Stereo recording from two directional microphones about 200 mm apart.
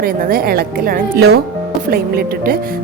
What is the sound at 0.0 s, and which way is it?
Speech, 50° right (ahead or behind).